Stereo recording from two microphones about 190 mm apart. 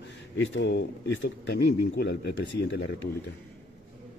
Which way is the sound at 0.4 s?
70° left (ahead or behind).